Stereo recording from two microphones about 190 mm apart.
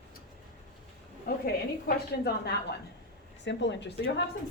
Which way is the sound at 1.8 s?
55° left (ahead or behind).